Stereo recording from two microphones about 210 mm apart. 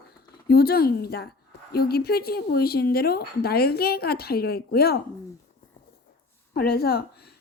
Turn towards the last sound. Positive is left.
turn(degrees=50)  # may be behind; listen again after turning